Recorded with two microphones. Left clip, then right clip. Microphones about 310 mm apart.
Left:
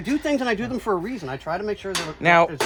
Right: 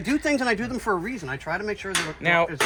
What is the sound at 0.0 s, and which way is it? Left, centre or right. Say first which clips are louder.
Speech: even; centre.